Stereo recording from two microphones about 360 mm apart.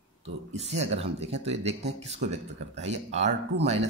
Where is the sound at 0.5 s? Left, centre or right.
Centre.